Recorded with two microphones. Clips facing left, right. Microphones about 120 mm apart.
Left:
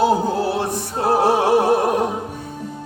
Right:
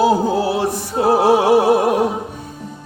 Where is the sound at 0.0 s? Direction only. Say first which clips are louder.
Right 2 dB; 5° right (ahead or behind).